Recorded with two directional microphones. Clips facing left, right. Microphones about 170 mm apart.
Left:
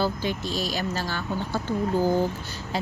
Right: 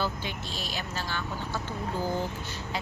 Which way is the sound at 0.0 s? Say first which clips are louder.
Left 6 dB; 40° left (ahead or behind).